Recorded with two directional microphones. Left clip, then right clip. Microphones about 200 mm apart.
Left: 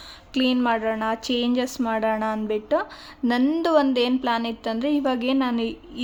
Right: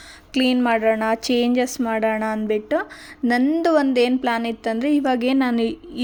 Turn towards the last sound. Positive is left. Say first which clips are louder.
# right 4 dB
turn(degrees=-20)  # may be behind; listen again after turning